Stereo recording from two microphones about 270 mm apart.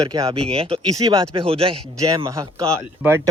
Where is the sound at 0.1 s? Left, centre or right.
Centre.